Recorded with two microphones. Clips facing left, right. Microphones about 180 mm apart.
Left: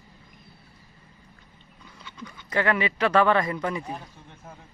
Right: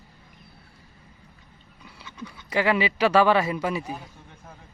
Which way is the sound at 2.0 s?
10° right (ahead or behind).